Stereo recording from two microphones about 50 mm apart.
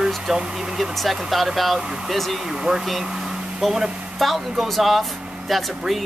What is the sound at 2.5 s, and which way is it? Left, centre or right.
Speech, centre.